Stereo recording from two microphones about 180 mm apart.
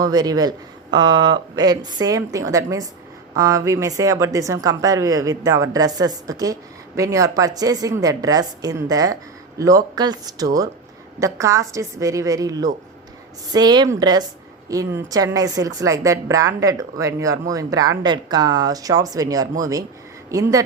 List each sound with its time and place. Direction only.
0.0 s a woman's voice: 20° right (ahead or behind)